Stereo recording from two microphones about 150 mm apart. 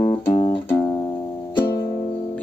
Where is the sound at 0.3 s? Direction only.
40° left (ahead or behind).